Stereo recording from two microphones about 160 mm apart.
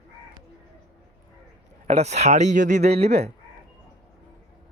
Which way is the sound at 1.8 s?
45° right (ahead or behind).